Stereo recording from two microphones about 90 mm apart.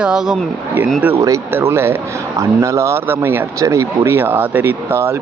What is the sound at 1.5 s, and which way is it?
Speech, 30° right (ahead or behind).